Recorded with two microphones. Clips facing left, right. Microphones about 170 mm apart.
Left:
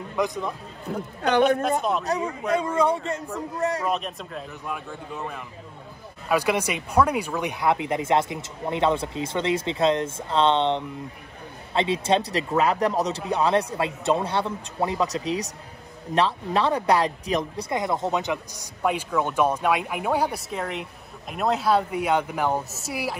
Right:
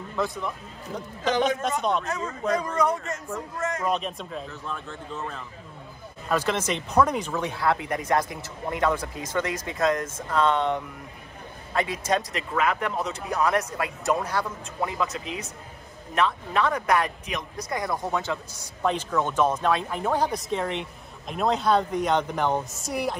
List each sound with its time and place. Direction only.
0.1 s speech: 15° left (ahead or behind)
1.2 s a man's voice: 60° left (ahead or behind)
1.6 s speech: 5° left (ahead or behind)
2.1 s speech: 15° left (ahead or behind)
2.8 s speech: 30° left (ahead or behind)
3.8 s speech: centre (ahead or behind)
4.5 s speech: 10° left (ahead or behind)